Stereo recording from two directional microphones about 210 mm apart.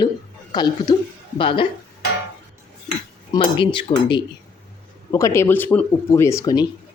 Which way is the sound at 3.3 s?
25° left (ahead or behind).